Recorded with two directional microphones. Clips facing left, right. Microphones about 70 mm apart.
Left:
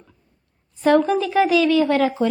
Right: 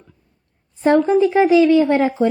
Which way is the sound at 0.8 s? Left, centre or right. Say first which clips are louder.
Right 3 dB; right.